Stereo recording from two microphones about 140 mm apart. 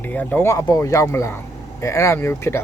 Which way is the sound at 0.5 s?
25° left (ahead or behind).